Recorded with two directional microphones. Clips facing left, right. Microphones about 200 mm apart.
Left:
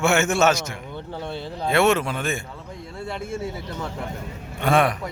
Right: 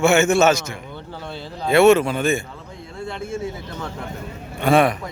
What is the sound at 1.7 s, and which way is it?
Speech, centre (ahead or behind).